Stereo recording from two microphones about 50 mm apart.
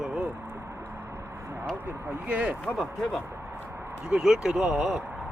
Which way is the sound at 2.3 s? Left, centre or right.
Right.